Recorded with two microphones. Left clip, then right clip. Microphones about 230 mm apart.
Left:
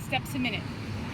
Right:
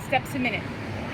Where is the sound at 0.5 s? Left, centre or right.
Centre.